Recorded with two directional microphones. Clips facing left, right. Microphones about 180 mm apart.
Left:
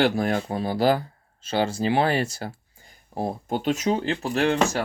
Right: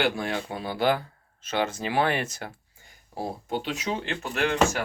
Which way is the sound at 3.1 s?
45° left (ahead or behind).